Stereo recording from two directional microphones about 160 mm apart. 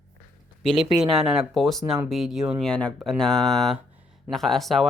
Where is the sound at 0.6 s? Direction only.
Centre (ahead or behind).